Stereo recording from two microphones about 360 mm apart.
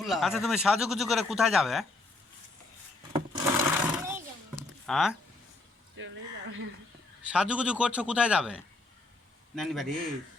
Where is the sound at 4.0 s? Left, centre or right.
Centre.